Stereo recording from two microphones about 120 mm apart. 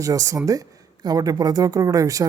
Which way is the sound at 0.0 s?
25° right (ahead or behind).